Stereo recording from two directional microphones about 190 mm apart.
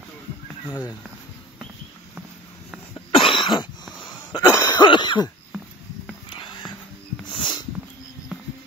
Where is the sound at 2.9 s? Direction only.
25° left (ahead or behind).